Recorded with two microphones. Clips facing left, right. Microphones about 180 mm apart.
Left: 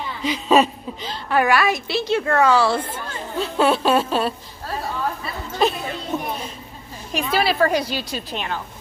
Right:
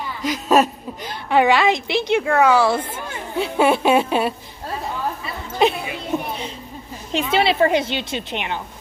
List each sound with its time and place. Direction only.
0.2 s a woman's voice: 5° right (ahead or behind)
1.3 s a woman's voice: 20° right (ahead or behind)
6.1 s a sound: 15° right (ahead or behind)
7.1 s a woman's voice: 25° right (ahead or behind)